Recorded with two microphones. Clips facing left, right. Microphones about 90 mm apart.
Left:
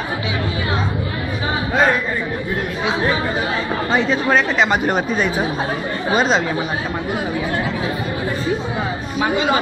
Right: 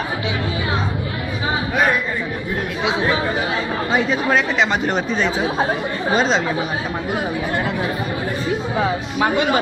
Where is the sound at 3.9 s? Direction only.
5° right (ahead or behind).